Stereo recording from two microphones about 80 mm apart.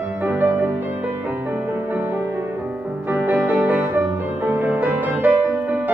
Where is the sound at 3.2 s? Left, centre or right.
Centre.